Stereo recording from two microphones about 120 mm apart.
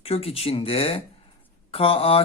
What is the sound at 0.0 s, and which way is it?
Speech, 55° left (ahead or behind).